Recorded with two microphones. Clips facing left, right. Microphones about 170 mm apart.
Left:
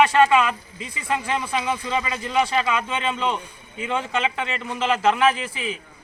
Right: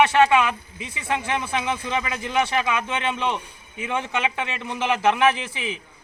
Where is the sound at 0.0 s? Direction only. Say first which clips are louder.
Even; 5° right (ahead or behind).